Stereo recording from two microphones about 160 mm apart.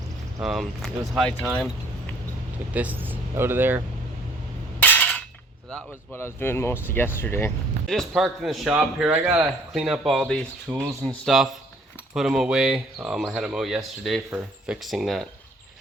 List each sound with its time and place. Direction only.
0.4 s speech: centre (ahead or behind)
2.7 s speech: 10° right (ahead or behind)
4.8 s a sound: 10° left (ahead or behind)
6.1 s speech: 15° left (ahead or behind)
7.9 s speech: centre (ahead or behind)